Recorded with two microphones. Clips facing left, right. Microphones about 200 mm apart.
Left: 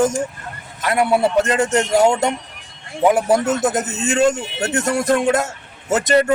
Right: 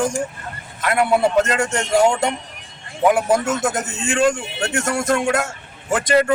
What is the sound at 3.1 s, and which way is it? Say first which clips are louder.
Speech: left 1 dB; 35° left (ahead or behind).